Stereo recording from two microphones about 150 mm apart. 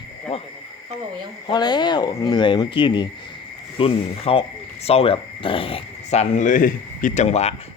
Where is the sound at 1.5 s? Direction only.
30° left (ahead or behind); by 7.5 s 45° left (ahead or behind).